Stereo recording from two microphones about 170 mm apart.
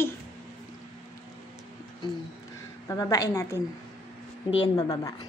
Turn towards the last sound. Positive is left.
turn(degrees=25)  # may be behind; listen again after turning